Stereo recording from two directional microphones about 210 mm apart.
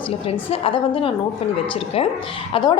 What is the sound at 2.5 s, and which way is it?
Speech, 20° left (ahead or behind).